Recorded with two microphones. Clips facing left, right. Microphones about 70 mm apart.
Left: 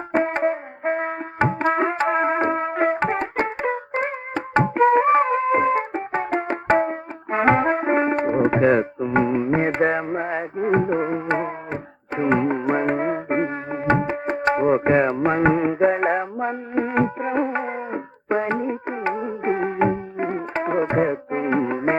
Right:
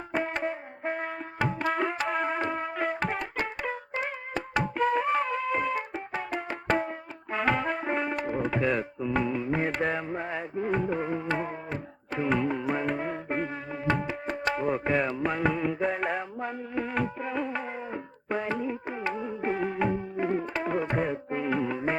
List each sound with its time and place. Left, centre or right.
0.1 s brass instrument: left
11.4 s music: left
13.2 s music: left
14.3 s music: left
14.8 s music: left
15.1 s music: left